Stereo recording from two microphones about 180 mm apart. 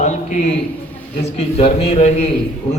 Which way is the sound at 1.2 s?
35° left (ahead or behind).